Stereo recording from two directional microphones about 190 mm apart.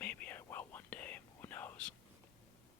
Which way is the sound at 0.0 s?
10° left (ahead or behind).